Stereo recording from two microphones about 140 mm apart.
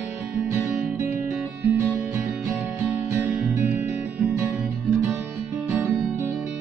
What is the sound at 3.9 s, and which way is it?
Guitar, 10° right (ahead or behind).